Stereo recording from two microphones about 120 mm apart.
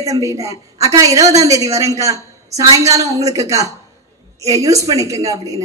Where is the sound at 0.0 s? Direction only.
25° right (ahead or behind).